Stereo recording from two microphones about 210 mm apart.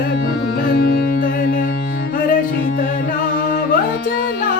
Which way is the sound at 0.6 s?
40° left (ahead or behind).